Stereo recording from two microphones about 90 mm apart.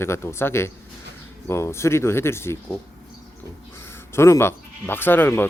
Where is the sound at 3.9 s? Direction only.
30° left (ahead or behind).